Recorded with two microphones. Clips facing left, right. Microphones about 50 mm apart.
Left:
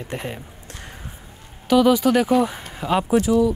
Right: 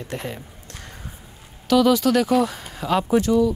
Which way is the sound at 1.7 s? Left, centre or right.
Centre.